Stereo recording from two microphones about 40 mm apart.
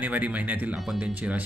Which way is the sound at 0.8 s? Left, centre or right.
Centre.